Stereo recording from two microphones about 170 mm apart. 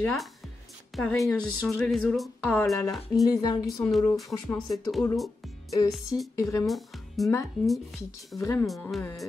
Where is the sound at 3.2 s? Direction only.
20° left (ahead or behind).